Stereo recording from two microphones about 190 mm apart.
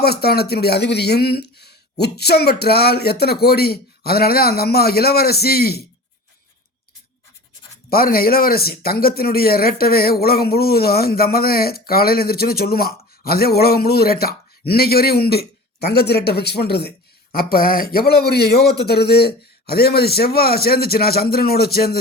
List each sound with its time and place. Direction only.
0.0 s a man's voice: 55° left (ahead or behind)
7.9 s a man's voice: 50° left (ahead or behind)